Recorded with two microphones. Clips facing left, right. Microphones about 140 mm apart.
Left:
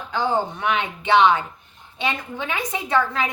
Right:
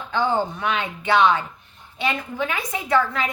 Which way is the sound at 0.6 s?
20° left (ahead or behind).